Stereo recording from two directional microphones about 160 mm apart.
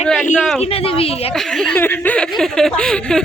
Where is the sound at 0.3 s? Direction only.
Centre (ahead or behind).